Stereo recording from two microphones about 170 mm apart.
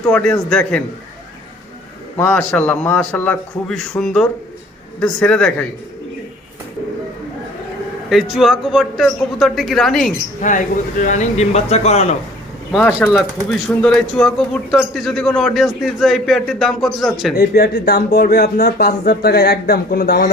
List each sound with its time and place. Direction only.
0.1 s a man's voice: 5° left (ahead or behind)
2.2 s a man's voice: 5° left (ahead or behind)
8.1 s a man's voice: centre (ahead or behind)
10.4 s speech: 45° left (ahead or behind)
13.0 s a man's voice: 5° left (ahead or behind)
17.3 s speech: 65° left (ahead or behind)